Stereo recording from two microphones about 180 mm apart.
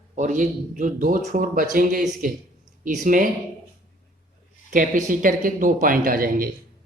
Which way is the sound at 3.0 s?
50° right (ahead or behind).